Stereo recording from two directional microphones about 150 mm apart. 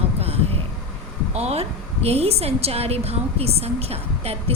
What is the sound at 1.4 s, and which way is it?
A woman's voice, 45° right (ahead or behind).